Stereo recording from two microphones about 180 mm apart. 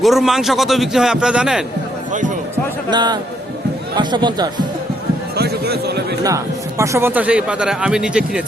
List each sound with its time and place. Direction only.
0.0 s a man's voice: centre (ahead or behind)
2.9 s speech: 25° right (ahead or behind)
5.4 s a sound: 65° right (ahead or behind)
6.2 s speech: 15° right (ahead or behind)